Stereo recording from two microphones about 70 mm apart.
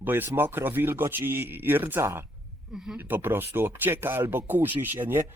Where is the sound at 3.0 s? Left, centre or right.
Right.